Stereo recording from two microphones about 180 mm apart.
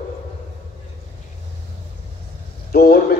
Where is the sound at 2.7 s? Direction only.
60° left (ahead or behind).